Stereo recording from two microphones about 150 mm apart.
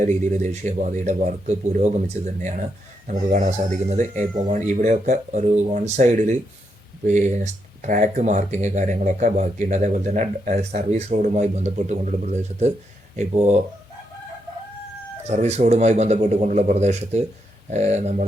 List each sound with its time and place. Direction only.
0.0 s speech: 55° right (ahead or behind)
15.3 s speech: 50° right (ahead or behind)